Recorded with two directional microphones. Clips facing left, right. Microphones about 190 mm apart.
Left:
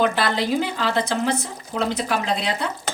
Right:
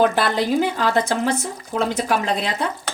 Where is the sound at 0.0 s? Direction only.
50° right (ahead or behind).